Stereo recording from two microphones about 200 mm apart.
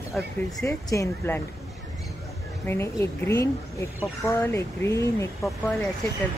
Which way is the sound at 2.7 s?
15° left (ahead or behind).